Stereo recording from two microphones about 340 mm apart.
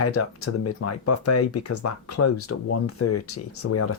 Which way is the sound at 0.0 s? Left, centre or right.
Left.